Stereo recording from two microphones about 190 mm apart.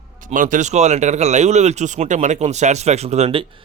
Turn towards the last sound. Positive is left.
turn(degrees=-30)  # may be behind; listen again after turning